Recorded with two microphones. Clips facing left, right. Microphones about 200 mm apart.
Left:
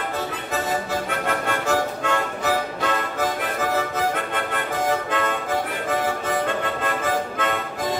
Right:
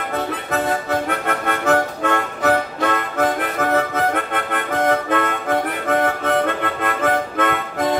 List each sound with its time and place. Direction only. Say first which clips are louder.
1.2 s music: right 3 dB; 60° right (ahead or behind)